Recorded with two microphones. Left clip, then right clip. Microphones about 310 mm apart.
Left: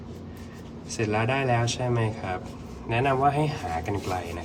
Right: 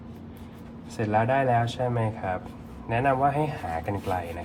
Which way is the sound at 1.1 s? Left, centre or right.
Right.